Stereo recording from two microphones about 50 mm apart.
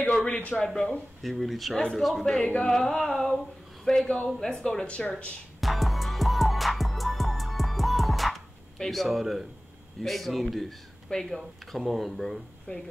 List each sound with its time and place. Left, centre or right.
0.3 s speech: left
1.2 s speech: centre
2.4 s speech: left
5.6 s music: centre
9.0 s speech: centre
11.1 s speech: centre
12.6 s speech: centre